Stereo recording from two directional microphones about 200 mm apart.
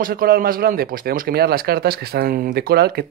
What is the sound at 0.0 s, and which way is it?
Speech, 45° right (ahead or behind).